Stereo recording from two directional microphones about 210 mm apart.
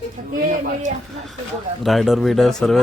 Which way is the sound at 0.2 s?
40° right (ahead or behind).